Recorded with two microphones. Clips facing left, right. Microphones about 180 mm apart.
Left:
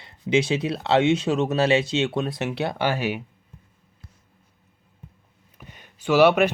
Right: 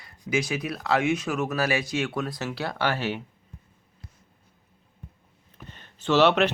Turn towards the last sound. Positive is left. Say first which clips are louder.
# left 3 dB
turn(degrees=10)  # may be behind; listen again after turning